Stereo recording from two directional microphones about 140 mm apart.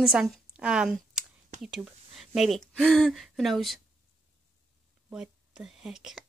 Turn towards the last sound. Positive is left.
turn(degrees=-5)  # may be behind; listen again after turning